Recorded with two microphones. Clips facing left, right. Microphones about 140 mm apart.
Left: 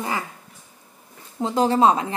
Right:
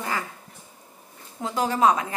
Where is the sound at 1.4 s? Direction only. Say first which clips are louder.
Left 4 dB; 30° left (ahead or behind).